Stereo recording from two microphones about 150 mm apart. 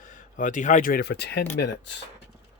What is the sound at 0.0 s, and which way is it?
Speech, 60° left (ahead or behind).